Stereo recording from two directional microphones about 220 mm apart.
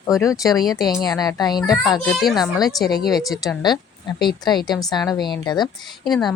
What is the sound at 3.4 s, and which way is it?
Speech, 20° left (ahead or behind).